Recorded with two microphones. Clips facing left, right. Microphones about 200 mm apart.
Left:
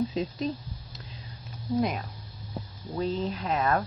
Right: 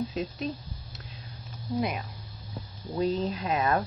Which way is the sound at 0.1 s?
5° right (ahead or behind).